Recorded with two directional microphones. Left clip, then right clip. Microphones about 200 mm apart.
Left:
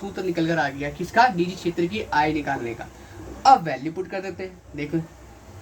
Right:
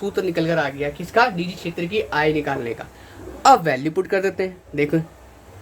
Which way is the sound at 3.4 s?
50° right (ahead or behind).